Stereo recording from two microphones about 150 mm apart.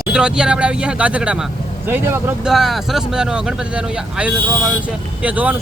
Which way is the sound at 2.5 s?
Centre (ahead or behind).